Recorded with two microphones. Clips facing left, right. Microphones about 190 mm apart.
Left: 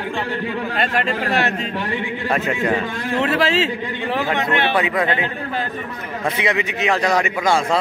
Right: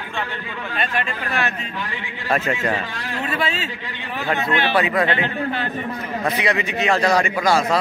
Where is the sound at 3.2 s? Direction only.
90° left.